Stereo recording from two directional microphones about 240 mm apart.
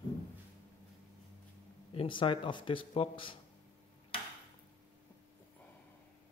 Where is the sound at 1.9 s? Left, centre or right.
Left.